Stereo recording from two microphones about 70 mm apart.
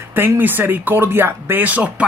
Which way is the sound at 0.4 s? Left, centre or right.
Right.